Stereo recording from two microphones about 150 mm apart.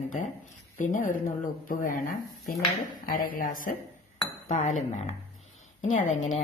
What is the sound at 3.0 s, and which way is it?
Speech, 70° left (ahead or behind).